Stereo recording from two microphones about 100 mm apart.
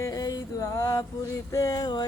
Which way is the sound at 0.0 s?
35° left (ahead or behind).